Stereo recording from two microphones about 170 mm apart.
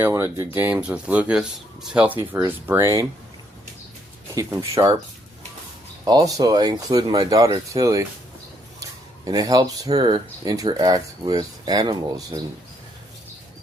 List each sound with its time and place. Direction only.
0.0 s speech: 15° right (ahead or behind)
4.4 s speech: 20° right (ahead or behind)
6.1 s speech: 20° right (ahead or behind)